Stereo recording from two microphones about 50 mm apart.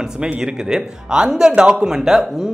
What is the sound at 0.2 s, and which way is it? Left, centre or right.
Speech, centre.